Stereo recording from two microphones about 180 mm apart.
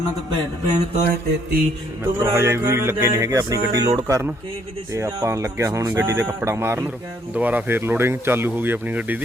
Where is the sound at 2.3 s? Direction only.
15° right (ahead or behind).